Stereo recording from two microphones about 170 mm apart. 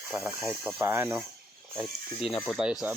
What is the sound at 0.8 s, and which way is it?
Speech, 15° right (ahead or behind).